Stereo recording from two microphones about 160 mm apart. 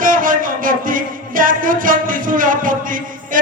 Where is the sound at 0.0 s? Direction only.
60° right (ahead or behind).